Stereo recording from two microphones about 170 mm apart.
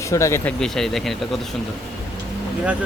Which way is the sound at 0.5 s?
5° left (ahead or behind).